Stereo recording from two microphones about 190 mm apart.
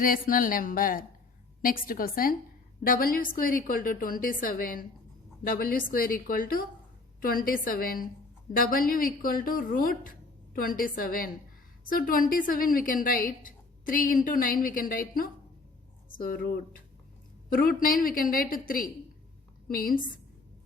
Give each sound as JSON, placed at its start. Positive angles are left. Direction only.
{"t": 0.0, "sound": "a woman's voice", "side_deg": 50}